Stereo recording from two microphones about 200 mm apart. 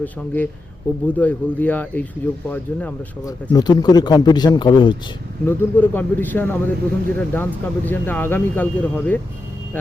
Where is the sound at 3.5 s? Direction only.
20° left (ahead or behind).